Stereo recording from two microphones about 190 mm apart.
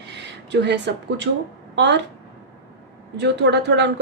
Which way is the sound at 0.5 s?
65° right (ahead or behind).